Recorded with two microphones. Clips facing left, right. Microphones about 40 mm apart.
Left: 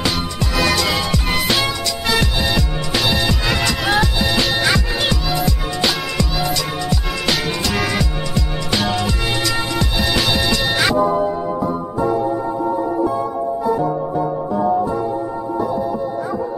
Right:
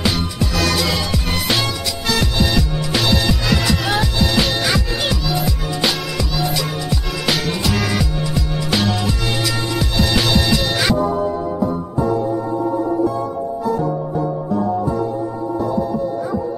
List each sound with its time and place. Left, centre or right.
2.0 s music: centre
11.1 s music: centre